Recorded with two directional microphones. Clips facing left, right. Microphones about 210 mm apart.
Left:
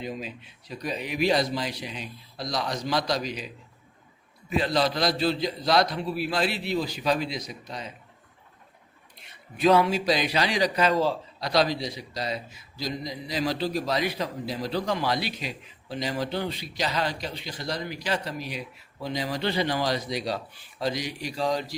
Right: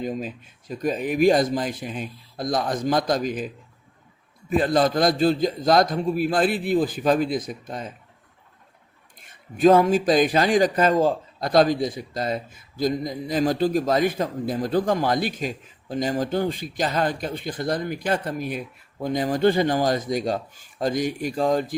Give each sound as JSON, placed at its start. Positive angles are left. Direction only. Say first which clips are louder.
{"t": 0.0, "sound": "speech", "louder": "right 6 dB", "side_deg": -45}
{"t": 9.1, "sound": "speech", "louder": "right 5 dB", "side_deg": -50}